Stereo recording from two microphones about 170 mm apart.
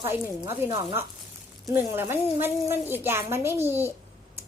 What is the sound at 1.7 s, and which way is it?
A woman's voice, 15° right (ahead or behind).